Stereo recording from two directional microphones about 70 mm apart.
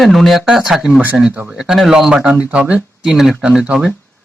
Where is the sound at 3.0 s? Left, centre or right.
Centre.